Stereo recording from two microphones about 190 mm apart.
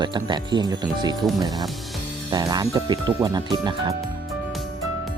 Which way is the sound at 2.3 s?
20° right (ahead or behind).